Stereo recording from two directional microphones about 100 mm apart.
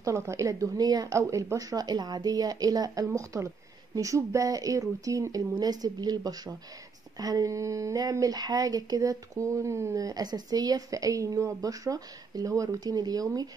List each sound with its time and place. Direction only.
0.0 s speech: 30° right (ahead or behind)